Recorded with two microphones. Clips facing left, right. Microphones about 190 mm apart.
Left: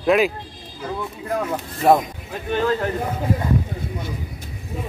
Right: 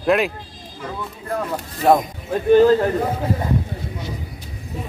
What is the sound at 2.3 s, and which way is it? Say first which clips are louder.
Speech: right 11 dB; 40° right (ahead or behind).